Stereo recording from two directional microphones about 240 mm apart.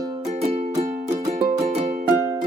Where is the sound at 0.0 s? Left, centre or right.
Centre.